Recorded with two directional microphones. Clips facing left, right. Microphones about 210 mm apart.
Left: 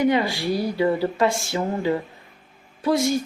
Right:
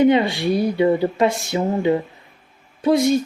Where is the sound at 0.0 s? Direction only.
25° right (ahead or behind).